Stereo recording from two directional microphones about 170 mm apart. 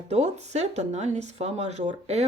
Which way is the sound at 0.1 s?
40° right (ahead or behind).